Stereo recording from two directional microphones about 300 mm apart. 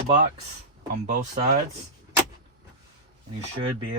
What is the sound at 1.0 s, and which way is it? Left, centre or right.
Speech, right.